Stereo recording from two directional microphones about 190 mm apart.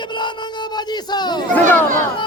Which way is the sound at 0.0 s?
25° left (ahead or behind).